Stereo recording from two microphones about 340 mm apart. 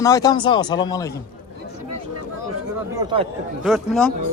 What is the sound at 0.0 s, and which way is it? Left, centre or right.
Speech, centre.